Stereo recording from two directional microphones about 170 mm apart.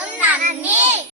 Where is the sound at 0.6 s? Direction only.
10° right (ahead or behind).